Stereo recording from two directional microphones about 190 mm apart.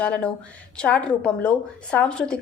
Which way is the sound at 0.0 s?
5° left (ahead or behind).